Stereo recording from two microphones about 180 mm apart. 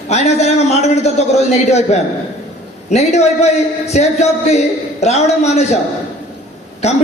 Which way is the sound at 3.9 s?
40° left (ahead or behind).